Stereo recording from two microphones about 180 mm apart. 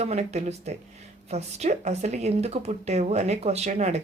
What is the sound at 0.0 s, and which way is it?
A woman's voice, 35° right (ahead or behind).